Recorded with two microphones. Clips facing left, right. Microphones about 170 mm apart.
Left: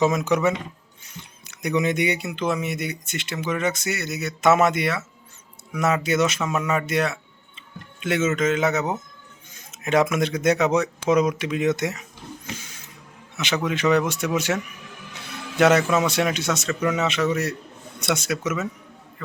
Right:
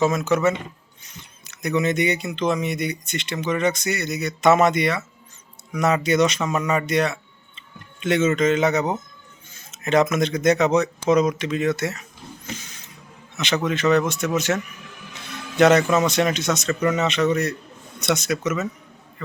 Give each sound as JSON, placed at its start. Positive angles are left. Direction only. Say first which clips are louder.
{"t": 0.0, "sound": "a man's voice", "louder": "right 1 dB", "side_deg": 15}
{"t": 12.5, "sound": "a sound", "louder": "right 4 dB", "side_deg": 10}
{"t": 13.3, "sound": "a man's voice", "louder": "right 2 dB", "side_deg": 10}